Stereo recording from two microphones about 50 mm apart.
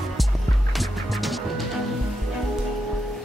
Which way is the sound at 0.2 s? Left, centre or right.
Centre.